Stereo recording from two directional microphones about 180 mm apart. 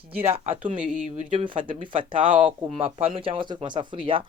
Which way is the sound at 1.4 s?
30° right (ahead or behind).